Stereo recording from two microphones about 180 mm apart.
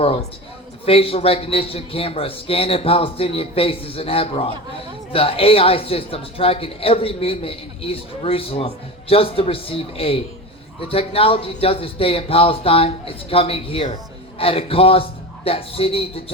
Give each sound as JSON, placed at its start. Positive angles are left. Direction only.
{"t": 0.0, "sound": "speech", "side_deg": 35}